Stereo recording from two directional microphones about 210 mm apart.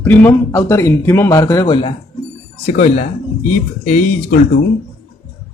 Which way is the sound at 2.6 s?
35° left (ahead or behind).